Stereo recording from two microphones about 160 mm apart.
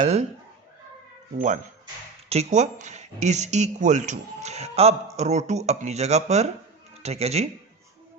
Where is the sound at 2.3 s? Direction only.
45° right (ahead or behind).